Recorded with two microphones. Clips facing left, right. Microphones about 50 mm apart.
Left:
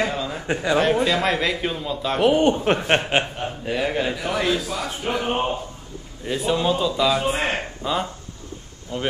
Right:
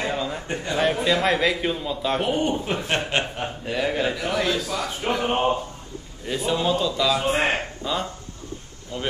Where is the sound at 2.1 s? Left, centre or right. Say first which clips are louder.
Left 8 dB; left.